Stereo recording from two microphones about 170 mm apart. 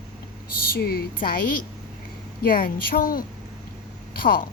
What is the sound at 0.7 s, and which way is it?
Speech, 65° left (ahead or behind).